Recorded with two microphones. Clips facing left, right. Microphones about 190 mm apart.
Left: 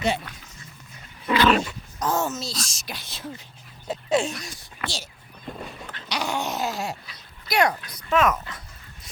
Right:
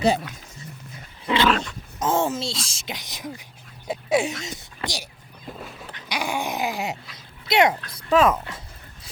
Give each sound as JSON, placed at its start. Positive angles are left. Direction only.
{"t": 1.5, "sound": "speech", "side_deg": 5}
{"t": 2.0, "sound": "speech", "side_deg": -25}
{"t": 3.8, "sound": "dog", "side_deg": -10}
{"t": 4.4, "sound": "speech", "side_deg": -20}
{"t": 5.5, "sound": "a sound", "side_deg": 0}
{"t": 5.9, "sound": "a sound", "side_deg": -10}
{"t": 7.4, "sound": "speech", "side_deg": -25}